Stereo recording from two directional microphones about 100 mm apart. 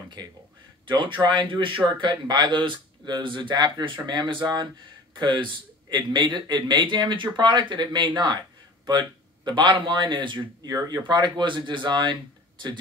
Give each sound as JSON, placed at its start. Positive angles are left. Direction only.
{"t": 0.8, "sound": "a man's voice", "side_deg": -55}
{"t": 10.7, "sound": "speech", "side_deg": -40}